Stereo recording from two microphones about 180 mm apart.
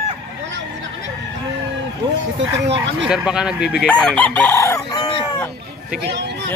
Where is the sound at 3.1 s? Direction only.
5° right (ahead or behind).